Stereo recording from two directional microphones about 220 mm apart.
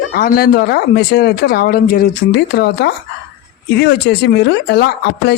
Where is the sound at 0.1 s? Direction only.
45° left (ahead or behind).